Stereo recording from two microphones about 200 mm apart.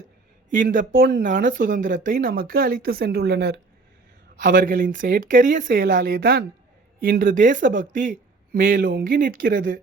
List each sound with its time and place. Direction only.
0.5 s speech: 40° right (ahead or behind)